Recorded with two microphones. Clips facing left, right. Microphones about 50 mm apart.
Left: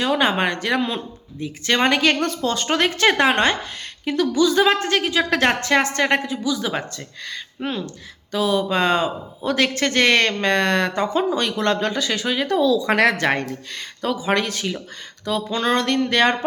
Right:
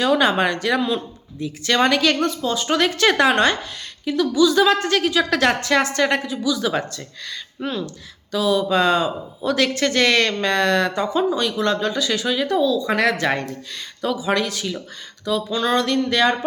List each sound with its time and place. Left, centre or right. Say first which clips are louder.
0.0 s speech: right 2 dB; left
2.2 s a woman's voice: even; left
2.6 s speech: right 1 dB; left
4.0 s speech: right 1 dB; left
4.5 s speech: right 1 dB; left
12.5 s speech: left 2 dB; left
12.9 s speech: left 2 dB; left